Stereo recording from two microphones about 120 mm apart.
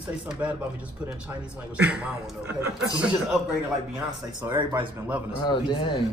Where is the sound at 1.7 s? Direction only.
10° right (ahead or behind).